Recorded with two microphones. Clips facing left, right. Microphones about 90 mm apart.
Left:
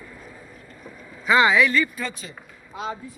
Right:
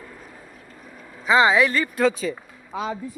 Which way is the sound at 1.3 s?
30° right (ahead or behind).